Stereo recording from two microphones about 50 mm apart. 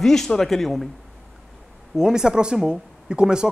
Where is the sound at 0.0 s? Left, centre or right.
Centre.